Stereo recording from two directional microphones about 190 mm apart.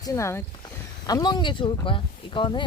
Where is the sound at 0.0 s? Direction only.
15° left (ahead or behind).